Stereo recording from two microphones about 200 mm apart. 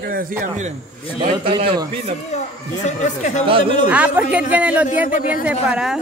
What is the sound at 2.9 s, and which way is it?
Speech, 35° left (ahead or behind).